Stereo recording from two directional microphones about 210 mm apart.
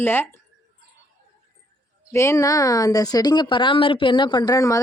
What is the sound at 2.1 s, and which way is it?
A woman's voice, 15° left (ahead or behind).